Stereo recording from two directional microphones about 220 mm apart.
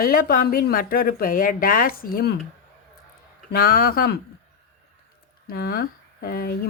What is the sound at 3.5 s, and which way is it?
Speech, 45° left (ahead or behind).